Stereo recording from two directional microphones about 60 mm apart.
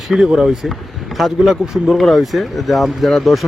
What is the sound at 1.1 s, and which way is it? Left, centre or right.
Speech, centre.